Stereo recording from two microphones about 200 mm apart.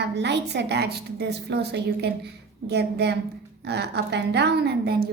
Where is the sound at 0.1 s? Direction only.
60° right (ahead or behind).